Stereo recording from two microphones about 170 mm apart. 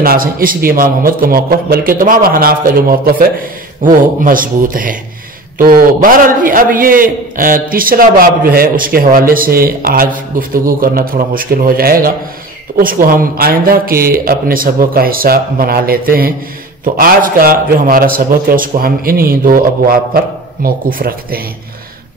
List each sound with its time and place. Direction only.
0.0 s a man's voice: 60° right (ahead or behind)